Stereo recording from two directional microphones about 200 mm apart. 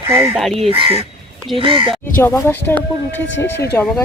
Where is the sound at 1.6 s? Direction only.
25° right (ahead or behind).